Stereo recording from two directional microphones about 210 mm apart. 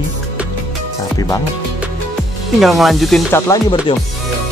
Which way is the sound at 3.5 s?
15° left (ahead or behind).